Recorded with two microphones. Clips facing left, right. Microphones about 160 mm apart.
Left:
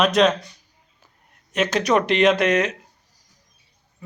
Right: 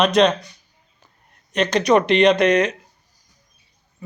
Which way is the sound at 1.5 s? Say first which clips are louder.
Right 3 dB; 5° left (ahead or behind).